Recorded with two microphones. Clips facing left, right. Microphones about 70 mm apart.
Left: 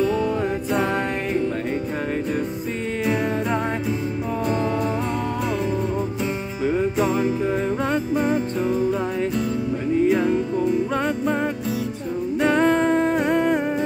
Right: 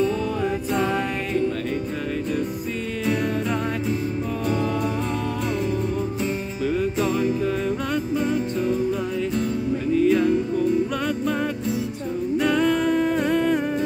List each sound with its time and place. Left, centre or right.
0.7 s music: left
6.6 s music: centre
9.9 s music: centre
12.4 s music: left